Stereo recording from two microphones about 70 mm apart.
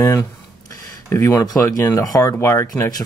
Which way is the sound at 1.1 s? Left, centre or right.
Left.